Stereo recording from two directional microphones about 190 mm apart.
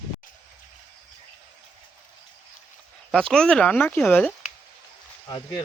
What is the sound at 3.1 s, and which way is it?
Speech, 5° left (ahead or behind).